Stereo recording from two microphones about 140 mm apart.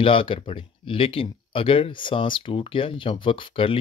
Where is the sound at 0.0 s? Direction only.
40° left (ahead or behind).